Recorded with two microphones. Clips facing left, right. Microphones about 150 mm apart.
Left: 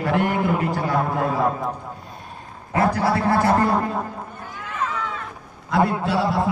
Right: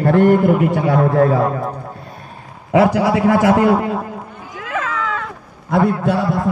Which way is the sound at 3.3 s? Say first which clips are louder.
Right 6 dB; 90° right.